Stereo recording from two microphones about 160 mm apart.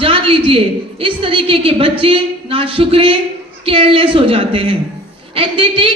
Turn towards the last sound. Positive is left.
turn(degrees=-35)  # may be behind; listen again after turning